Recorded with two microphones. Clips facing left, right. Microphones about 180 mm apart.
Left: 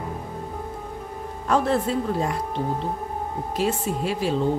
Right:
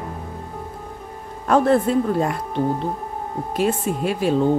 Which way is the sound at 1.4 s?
55° right (ahead or behind).